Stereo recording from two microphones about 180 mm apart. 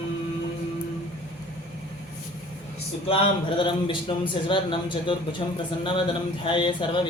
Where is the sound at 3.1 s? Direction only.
30° left (ahead or behind).